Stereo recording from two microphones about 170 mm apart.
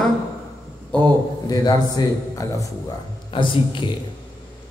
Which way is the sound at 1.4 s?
25° left (ahead or behind).